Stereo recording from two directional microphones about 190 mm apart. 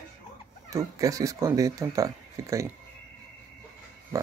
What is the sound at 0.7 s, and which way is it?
Speech, 15° right (ahead or behind).